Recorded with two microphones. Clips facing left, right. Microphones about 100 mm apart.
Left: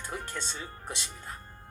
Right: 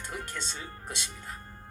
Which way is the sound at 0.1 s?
30° left (ahead or behind).